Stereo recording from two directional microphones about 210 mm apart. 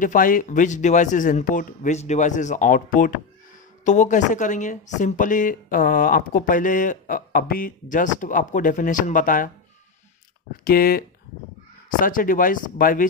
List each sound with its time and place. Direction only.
0.0 s speech: 40° left (ahead or behind)
10.5 s speech: 45° left (ahead or behind)